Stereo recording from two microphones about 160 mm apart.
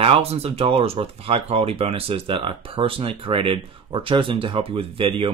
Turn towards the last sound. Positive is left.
turn(degrees=-35)  # may be behind; listen again after turning